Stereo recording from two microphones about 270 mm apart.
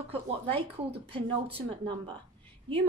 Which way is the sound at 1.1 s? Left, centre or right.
Centre.